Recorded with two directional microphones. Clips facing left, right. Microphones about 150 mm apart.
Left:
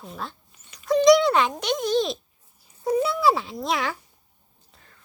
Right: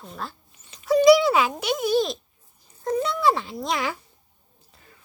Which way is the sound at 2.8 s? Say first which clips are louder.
Left 1 dB; 10° left (ahead or behind).